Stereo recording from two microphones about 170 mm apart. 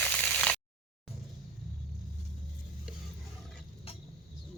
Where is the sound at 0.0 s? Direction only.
5° left (ahead or behind).